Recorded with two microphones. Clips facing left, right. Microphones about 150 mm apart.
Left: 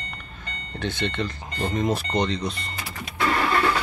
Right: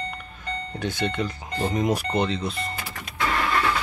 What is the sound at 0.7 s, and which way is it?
Speech, 10° right (ahead or behind).